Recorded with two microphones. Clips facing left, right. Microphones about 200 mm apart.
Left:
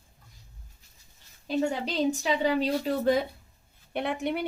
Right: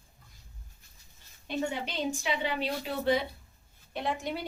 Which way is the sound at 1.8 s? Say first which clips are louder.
Left 6 dB; 40° left (ahead or behind).